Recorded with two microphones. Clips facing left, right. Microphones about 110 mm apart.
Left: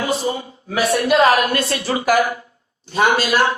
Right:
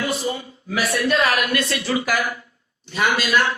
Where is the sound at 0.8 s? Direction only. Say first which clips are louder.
Left 5 dB; 35° left (ahead or behind).